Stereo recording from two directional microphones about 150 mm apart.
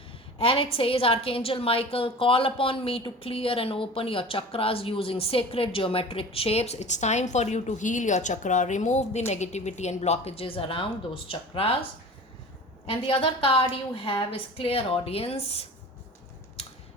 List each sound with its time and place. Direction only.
0.3 s a woman's voice: 40° left (ahead or behind)
12.8 s a woman's voice: 35° left (ahead or behind)
16.6 s scissors: 40° left (ahead or behind)